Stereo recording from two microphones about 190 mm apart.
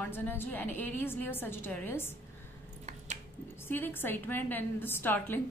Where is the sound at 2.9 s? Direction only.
35° right (ahead or behind).